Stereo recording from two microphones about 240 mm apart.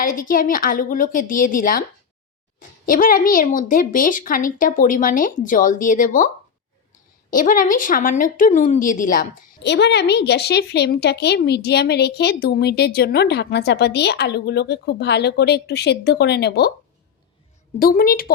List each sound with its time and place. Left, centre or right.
0.0 s speech: left
9.6 s a woman's voice: left
17.7 s speech: left